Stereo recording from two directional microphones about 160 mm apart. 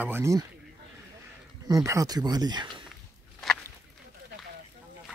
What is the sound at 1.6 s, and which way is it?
Speech, 20° right (ahead or behind).